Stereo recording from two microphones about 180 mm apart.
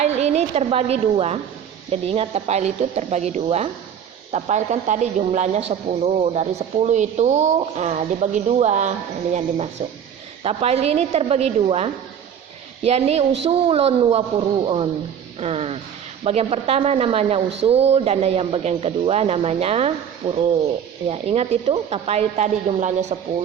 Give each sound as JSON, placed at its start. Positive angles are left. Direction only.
{"t": 0.0, "sound": "a woman's voice", "side_deg": -35}
{"t": 10.4, "sound": "speech", "side_deg": -35}